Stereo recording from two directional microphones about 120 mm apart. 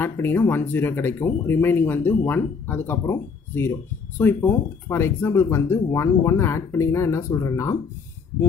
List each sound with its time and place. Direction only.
0.0 s speech: 20° left (ahead or behind)